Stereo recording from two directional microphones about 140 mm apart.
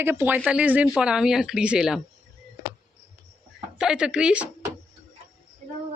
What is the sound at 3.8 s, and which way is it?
Speech, 5° right (ahead or behind).